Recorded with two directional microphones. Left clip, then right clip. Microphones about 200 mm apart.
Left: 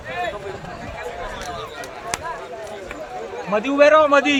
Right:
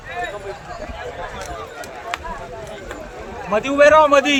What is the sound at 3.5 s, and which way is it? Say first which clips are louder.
Speech: right 2 dB; 60° right (ahead or behind).